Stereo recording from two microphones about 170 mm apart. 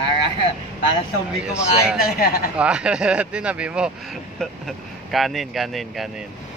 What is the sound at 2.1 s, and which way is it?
Speech, 60° left (ahead or behind).